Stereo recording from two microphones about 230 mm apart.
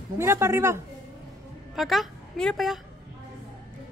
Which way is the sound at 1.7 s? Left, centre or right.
Centre.